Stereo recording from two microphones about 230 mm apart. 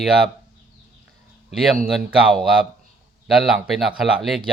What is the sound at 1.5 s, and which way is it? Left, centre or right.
Speech, centre.